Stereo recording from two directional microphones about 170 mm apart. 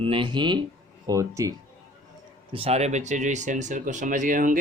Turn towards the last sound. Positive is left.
turn(degrees=-50)  # may be behind; listen again after turning